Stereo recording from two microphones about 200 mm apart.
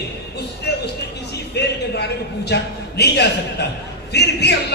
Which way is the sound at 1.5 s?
55° left (ahead or behind).